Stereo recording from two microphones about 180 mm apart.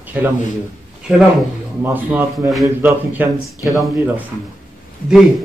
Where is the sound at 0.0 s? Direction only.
10° right (ahead or behind).